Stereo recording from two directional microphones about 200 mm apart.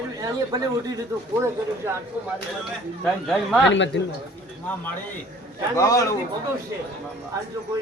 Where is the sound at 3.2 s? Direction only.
Centre (ahead or behind).